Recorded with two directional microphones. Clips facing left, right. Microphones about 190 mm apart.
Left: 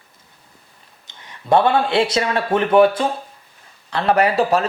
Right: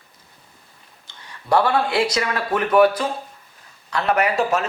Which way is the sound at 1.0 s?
20° left (ahead or behind).